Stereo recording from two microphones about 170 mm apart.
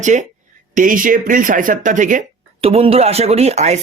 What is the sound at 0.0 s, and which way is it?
Speech, 45° right (ahead or behind).